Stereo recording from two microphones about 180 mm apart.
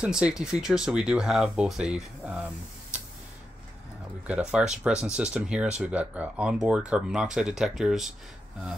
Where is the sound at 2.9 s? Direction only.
5° right (ahead or behind).